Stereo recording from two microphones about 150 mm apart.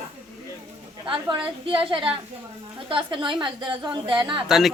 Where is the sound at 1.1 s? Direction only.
30° right (ahead or behind).